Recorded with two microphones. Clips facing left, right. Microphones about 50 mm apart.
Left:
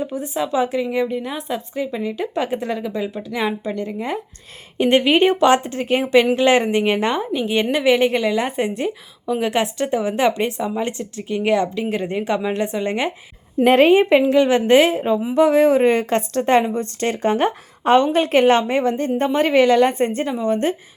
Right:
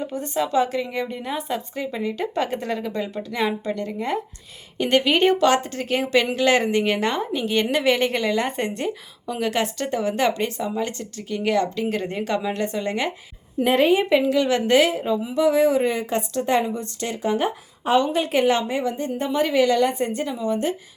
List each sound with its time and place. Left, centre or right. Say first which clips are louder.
0.0 s a woman's voice: left 2 dB; centre
4.8 s a woman's voice: left 4 dB; left
13.6 s a woman's voice: left 5 dB; left